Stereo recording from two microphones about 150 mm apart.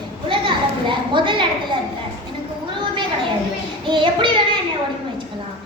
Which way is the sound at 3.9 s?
35° right (ahead or behind).